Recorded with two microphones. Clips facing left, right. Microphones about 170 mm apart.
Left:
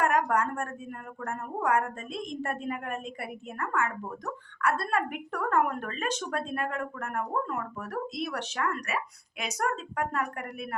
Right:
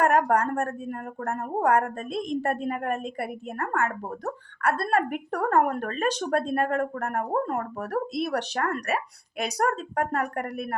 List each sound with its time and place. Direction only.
0.0 s a woman's voice: 35° right (ahead or behind)